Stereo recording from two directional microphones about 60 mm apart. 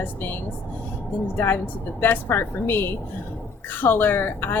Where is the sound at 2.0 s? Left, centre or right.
Left.